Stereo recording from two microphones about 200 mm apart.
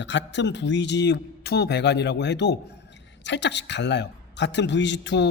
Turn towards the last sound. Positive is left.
turn(degrees=60)  # may be behind; listen again after turning